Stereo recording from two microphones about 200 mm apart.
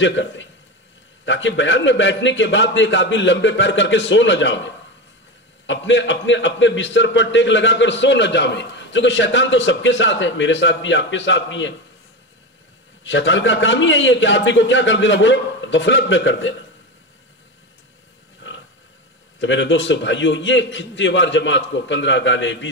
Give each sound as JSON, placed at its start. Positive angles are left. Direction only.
{"t": 0.0, "sound": "a man's voice", "side_deg": 65}
{"t": 13.0, "sound": "a man's voice", "side_deg": 65}
{"t": 19.4, "sound": "a man's voice", "side_deg": 65}